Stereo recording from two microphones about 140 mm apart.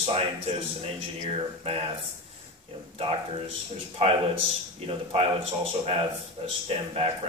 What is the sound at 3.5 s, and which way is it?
A man's voice, 45° right (ahead or behind).